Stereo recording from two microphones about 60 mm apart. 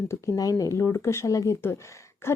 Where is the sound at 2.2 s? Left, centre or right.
Left.